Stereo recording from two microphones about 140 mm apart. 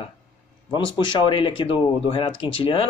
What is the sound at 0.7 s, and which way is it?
Speech, 35° left (ahead or behind).